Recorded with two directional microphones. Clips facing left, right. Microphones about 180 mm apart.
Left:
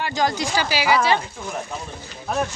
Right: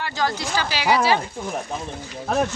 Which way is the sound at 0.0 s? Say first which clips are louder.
Left 2 dB; 15° left (ahead or behind).